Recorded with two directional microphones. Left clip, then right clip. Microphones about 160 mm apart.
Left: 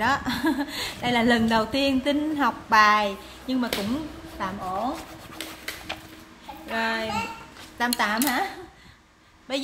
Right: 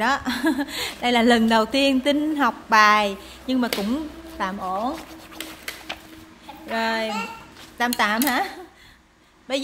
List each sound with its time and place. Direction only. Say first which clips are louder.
0.0 s a woman's voice: right 2 dB; 40° right (ahead or behind); by 4.9 s 60° right (ahead or behind)
6.7 s speech: right 2 dB; 45° right (ahead or behind)
8.2 s speech: right 3 dB; 75° right (ahead or behind)
9.5 s speech: right 3 dB; 45° right (ahead or behind)